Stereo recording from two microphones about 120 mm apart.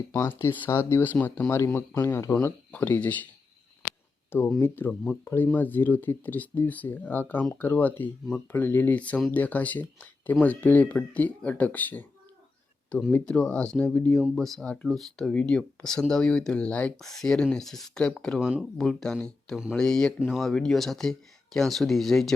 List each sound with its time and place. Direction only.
0.1 s speech: 20° left (ahead or behind)
4.3 s speech: 20° left (ahead or behind)
18.3 s speech: 5° right (ahead or behind)